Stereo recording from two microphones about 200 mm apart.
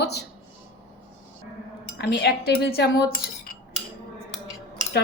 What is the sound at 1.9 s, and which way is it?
Speech, 55° left (ahead or behind).